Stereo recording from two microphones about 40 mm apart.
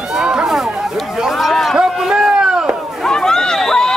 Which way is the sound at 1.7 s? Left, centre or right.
Centre.